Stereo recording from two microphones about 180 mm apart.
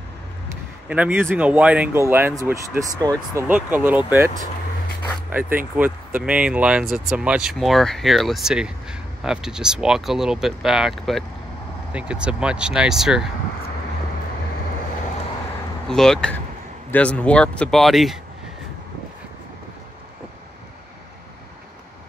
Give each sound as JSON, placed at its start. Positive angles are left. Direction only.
{"t": 0.8, "sound": "speech", "side_deg": -10}
{"t": 3.4, "sound": "speech", "side_deg": -10}
{"t": 5.3, "sound": "speech", "side_deg": -10}
{"t": 15.9, "sound": "speech", "side_deg": 5}